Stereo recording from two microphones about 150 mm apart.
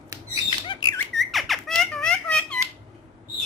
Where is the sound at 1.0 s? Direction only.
Centre (ahead or behind).